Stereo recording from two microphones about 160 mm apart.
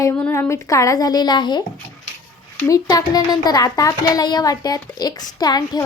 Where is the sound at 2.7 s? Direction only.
25° left (ahead or behind).